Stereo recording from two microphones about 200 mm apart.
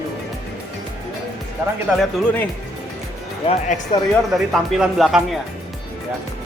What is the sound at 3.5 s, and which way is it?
Speech, 40° left (ahead or behind).